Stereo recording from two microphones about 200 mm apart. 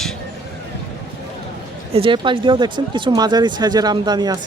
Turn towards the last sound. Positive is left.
turn(degrees=-20)  # may be behind; listen again after turning